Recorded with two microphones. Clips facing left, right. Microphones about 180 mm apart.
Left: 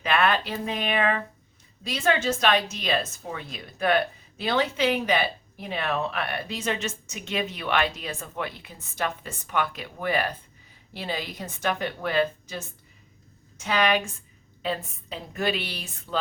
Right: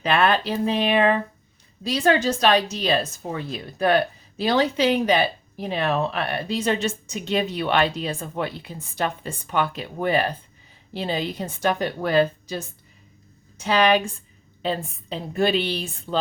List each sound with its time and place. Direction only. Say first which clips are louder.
0.0 s a woman's voice: right 3 dB; 30° right (ahead or behind)